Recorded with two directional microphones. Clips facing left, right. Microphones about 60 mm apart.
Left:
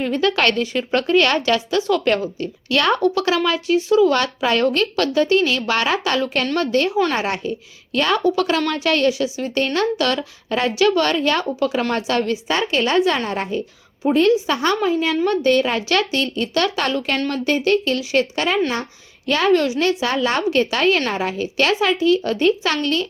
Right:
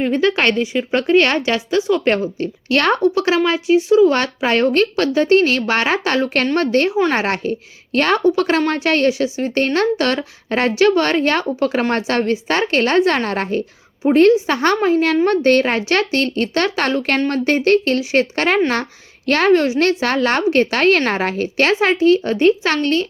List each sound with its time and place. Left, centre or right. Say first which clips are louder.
0.0 s speech: right 2 dB; right
2.4 s speech: right 2 dB; right
3.0 s speech: right 3 dB; right
8.2 s speech: right 3 dB; right
12.5 s speech: right 3 dB; right
14.1 s a woman's voice: right 4 dB; right
19.5 s speech: right 2 dB; right
19.8 s speech: right 3 dB; right